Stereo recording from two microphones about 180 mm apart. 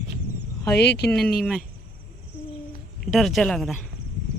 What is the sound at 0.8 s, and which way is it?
Speech, 70° left (ahead or behind).